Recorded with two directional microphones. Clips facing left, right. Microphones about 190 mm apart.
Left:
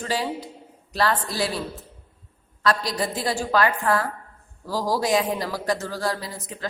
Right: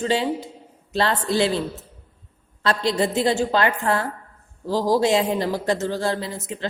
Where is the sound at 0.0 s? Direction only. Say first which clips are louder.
Right 5 dB; 25° right (ahead or behind).